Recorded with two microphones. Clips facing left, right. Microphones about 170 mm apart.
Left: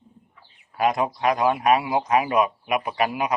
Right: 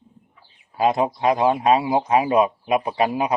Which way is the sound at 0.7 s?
25° right (ahead or behind).